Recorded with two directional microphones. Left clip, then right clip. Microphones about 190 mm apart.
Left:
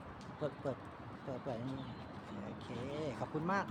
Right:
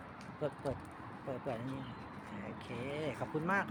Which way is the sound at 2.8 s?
Centre (ahead or behind).